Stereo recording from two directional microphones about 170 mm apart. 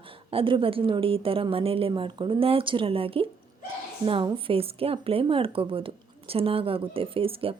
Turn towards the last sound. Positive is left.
turn(degrees=-35)  # may be behind; listen again after turning